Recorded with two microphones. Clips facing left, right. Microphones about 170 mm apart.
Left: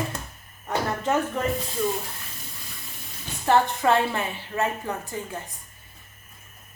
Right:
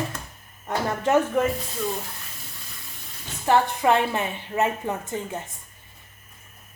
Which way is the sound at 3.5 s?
15° right (ahead or behind).